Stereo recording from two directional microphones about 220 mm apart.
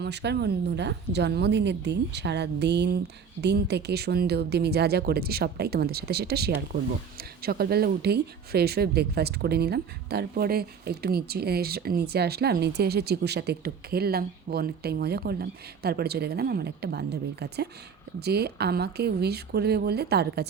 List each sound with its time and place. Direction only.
0.0 s speech: 50° right (ahead or behind)